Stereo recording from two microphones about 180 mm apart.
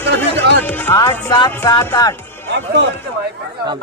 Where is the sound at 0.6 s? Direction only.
10° left (ahead or behind).